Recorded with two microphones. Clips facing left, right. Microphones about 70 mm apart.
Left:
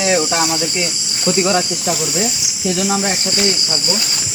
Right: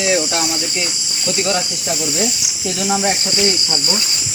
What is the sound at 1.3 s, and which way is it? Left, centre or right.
Cricket, left.